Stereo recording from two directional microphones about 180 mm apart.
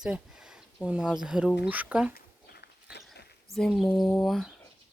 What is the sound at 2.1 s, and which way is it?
Dog, 65° left (ahead or behind).